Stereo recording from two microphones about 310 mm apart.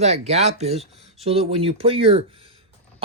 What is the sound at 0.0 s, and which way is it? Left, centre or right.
Speech, right.